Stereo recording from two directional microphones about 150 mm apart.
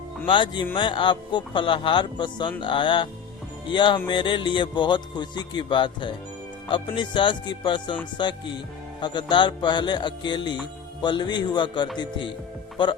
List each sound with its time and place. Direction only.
0.3 s speech: 30° left (ahead or behind)